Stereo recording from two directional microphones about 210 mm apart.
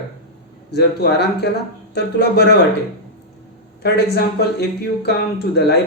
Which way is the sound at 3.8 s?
50° left (ahead or behind).